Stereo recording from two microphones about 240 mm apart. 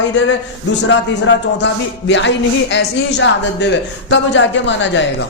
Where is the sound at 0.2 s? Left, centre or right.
Left.